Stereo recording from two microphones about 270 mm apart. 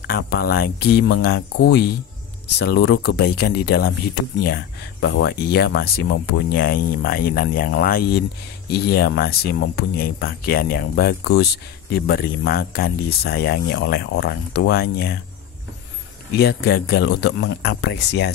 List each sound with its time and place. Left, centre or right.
0.0 s speech: left
16.3 s speech: left